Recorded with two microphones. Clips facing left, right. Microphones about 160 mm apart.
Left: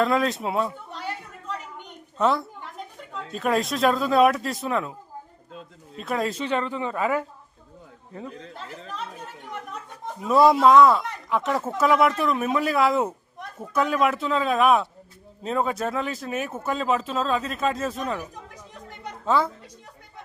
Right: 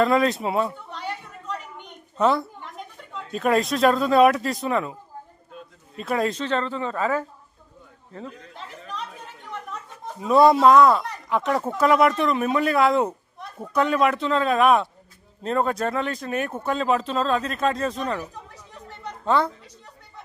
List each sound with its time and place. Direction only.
0.0 s speech: centre (ahead or behind)
2.1 s speech: centre (ahead or behind)
6.0 s speech: centre (ahead or behind)
6.4 s speech: 15° left (ahead or behind)
10.2 s a woman's voice: centre (ahead or behind)